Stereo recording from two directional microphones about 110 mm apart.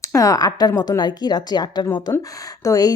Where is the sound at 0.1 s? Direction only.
30° left (ahead or behind).